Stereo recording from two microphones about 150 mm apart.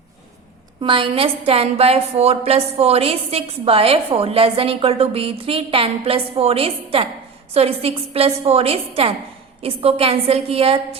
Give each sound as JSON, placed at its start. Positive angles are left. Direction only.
{"t": 0.8, "sound": "a woman's voice", "side_deg": -35}